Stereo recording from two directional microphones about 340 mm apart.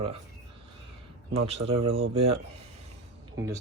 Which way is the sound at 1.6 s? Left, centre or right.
Centre.